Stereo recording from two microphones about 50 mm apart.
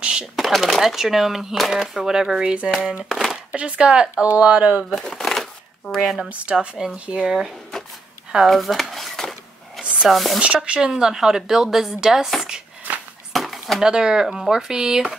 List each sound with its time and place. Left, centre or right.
0.0 s speech: centre
0.4 s speech: centre
3.5 s speech: right
4.9 s a sound: centre
5.9 s speech: centre
6.5 s speech: centre
8.5 s a sound: centre
10.0 s speech: centre
10.4 s speech: right
10.9 s speech: centre
13.3 s chopping: centre
13.8 s speech: centre